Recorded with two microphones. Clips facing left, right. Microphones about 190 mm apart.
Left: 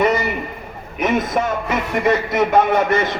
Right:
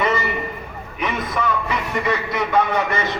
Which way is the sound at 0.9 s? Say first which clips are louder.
Left 6 dB; 45° left (ahead or behind).